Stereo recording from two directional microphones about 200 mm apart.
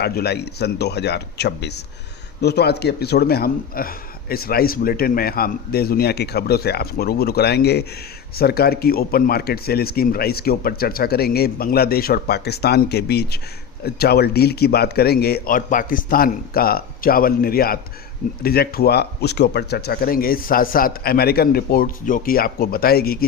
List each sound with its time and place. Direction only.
0.0 s speech: 50° left (ahead or behind)